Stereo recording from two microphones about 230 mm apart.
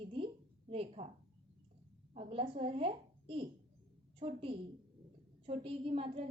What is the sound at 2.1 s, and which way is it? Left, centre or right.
A woman's voice, right.